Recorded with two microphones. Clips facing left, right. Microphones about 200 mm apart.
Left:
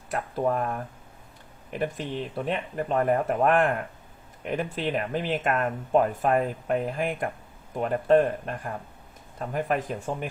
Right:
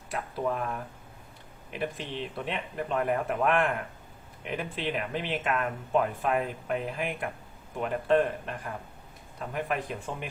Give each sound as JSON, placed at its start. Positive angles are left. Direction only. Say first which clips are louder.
{"t": 0.1, "sound": "speech", "louder": "left 5 dB", "side_deg": 45}
{"t": 2.0, "sound": "speech", "louder": "left 4 dB", "side_deg": 40}